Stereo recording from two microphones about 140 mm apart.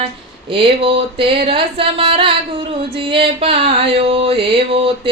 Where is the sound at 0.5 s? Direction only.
40° right (ahead or behind).